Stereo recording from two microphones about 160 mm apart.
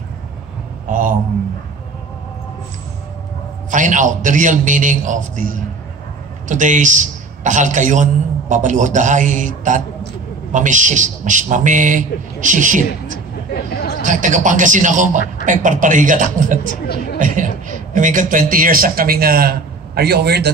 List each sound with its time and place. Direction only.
0.8 s a man's voice: 55° right (ahead or behind)
3.7 s a man's voice: 50° right (ahead or behind)
13.5 s chatter: 85° left
14.0 s a man's voice: 50° right (ahead or behind)
16.6 s speech: 75° left (ahead or behind)
17.2 s a man's voice: 50° right (ahead or behind); by 19.5 s 70° right (ahead or behind)
20.0 s a man's voice: 90° right